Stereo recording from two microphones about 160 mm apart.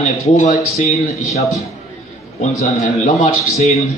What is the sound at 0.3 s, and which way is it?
Speech, 50° left (ahead or behind).